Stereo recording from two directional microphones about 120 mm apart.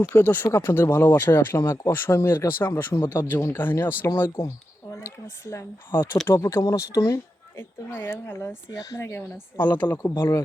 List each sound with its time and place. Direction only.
0.1 s speech: 20° left (ahead or behind)